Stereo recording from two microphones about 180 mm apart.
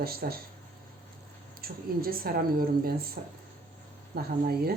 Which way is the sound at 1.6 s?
55° right (ahead or behind).